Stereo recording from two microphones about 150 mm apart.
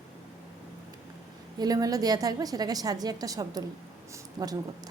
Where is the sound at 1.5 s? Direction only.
25° right (ahead or behind).